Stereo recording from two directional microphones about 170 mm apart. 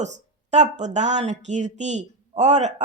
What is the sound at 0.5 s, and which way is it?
Speech, 45° right (ahead or behind).